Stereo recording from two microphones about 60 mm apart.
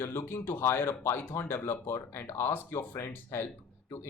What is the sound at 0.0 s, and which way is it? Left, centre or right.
Speech, left.